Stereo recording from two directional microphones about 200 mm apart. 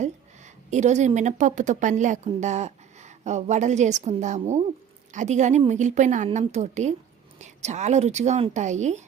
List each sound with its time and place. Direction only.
0.0 s a woman's voice: 35° right (ahead or behind)